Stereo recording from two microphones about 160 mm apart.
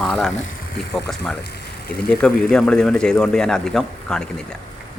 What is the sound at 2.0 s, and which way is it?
Speech, 5° left (ahead or behind).